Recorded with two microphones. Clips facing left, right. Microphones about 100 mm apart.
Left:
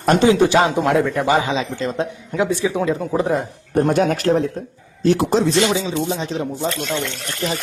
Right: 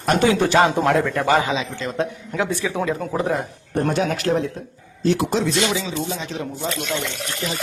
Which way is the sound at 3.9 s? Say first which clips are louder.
Left 4 dB; 50° left (ahead or behind).